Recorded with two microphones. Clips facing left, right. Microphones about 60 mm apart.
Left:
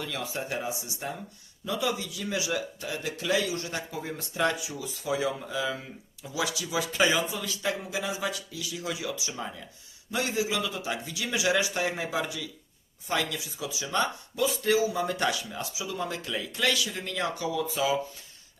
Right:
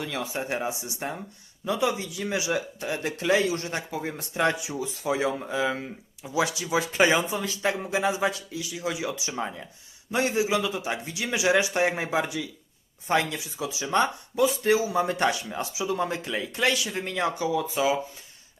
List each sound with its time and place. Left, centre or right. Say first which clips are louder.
0.0 s a man's voice: right 3 dB; right